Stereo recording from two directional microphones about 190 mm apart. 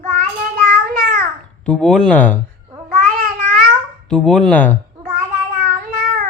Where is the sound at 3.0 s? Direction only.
50° right (ahead or behind).